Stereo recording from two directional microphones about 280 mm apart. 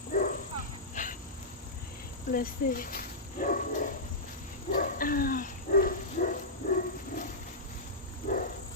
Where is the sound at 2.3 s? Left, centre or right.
Left.